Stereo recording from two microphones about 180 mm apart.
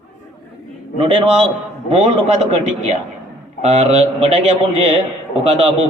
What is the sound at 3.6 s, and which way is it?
A man's voice, 35° right (ahead or behind).